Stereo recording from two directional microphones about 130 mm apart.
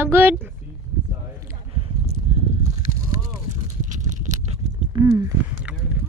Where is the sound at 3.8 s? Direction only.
75° right (ahead or behind).